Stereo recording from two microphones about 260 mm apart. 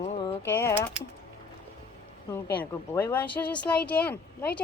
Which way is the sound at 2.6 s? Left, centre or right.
Centre.